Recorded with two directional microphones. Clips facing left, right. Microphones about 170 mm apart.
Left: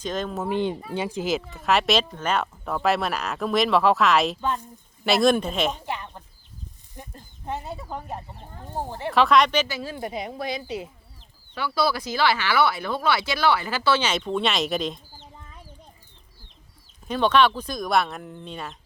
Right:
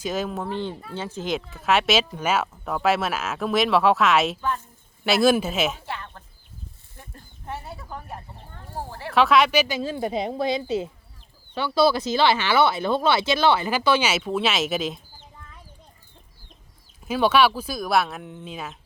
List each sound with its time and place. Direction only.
0.0 s speech: 5° right (ahead or behind)
0.4 s speech: 15° left (ahead or behind); by 4.4 s centre (ahead or behind)
4.4 s speech: 20° left (ahead or behind)
5.0 s speech: 5° right (ahead or behind)
5.8 s speech: 15° left (ahead or behind)
9.1 s speech: centre (ahead or behind)
17.1 s speech: 10° right (ahead or behind)